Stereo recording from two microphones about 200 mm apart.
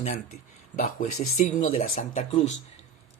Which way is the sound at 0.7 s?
45° left (ahead or behind).